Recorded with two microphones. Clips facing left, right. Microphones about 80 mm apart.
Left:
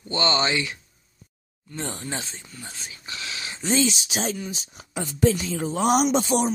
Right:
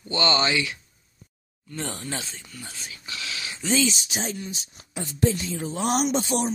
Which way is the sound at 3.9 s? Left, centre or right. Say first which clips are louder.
Left 3 dB; left.